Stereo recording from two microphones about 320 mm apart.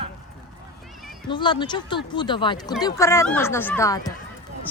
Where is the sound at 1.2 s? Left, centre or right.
Centre.